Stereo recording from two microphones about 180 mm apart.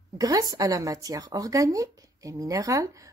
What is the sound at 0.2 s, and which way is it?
Speech, 20° right (ahead or behind).